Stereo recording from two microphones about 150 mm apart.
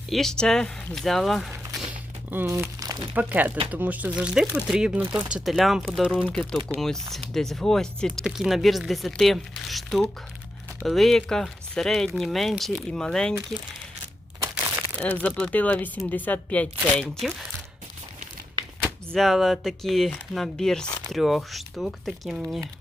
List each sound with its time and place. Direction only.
0.1 s speech: 5° left (ahead or behind)
2.3 s speech: 15° right (ahead or behind)
3.2 s speech: 10° right (ahead or behind); by 13.3 s 5° left (ahead or behind)
14.9 s speech: 10° left (ahead or behind)
18.8 s speech: centre (ahead or behind)